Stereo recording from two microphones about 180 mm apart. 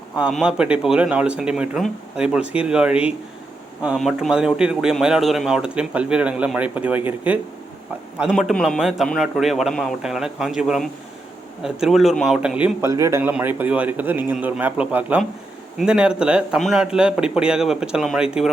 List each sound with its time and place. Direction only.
0.2 s a man's voice: 5° right (ahead or behind)